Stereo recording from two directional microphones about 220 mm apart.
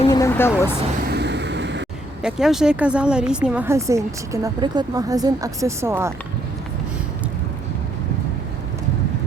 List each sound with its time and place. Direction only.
0.1 s a sound: 10° left (ahead or behind)
1.0 s vehicle: 50° right (ahead or behind)
2.2 s speech: centre (ahead or behind)